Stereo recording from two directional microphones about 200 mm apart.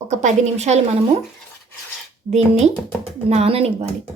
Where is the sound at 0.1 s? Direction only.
35° right (ahead or behind).